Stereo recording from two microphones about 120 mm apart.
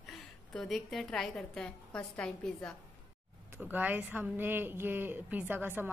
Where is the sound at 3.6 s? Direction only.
15° right (ahead or behind).